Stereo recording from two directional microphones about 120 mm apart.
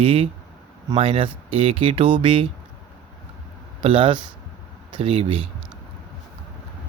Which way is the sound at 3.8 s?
50° right (ahead or behind).